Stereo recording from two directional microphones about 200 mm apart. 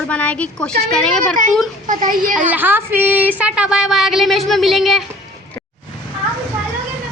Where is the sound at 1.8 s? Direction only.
40° right (ahead or behind).